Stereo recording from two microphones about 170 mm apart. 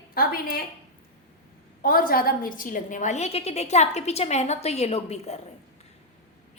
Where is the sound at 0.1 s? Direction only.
60° left (ahead or behind).